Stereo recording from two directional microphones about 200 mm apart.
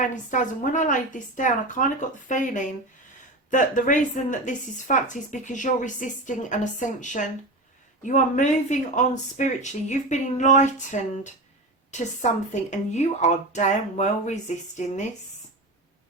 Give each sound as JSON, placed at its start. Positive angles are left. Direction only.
{"t": 0.0, "sound": "a woman's voice", "side_deg": 40}